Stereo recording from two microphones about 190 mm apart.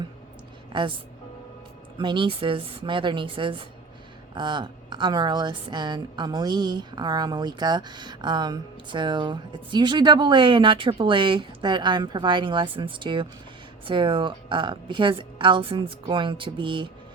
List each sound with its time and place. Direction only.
0.7 s a woman's voice: 25° right (ahead or behind)
2.0 s a woman's voice: 25° right (ahead or behind)